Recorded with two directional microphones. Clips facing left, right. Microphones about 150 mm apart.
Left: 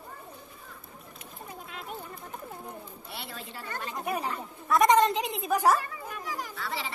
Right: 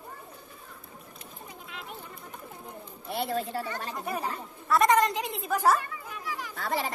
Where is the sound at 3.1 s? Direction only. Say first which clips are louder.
Right 13 dB; 45° right (ahead or behind).